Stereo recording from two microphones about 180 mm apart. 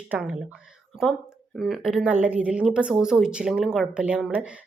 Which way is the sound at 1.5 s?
Centre (ahead or behind).